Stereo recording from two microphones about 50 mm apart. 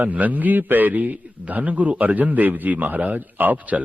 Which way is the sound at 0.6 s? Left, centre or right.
Right.